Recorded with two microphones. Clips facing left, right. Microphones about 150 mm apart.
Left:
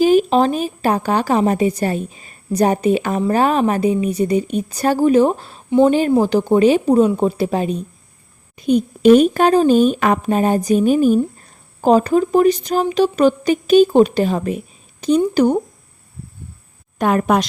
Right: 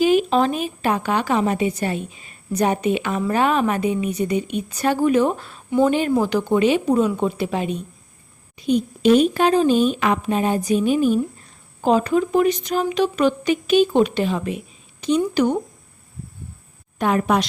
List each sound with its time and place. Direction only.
0.0 s a woman's voice: 40° left (ahead or behind)
8.5 s a woman's voice: 50° left (ahead or behind)
17.0 s speech: 50° left (ahead or behind)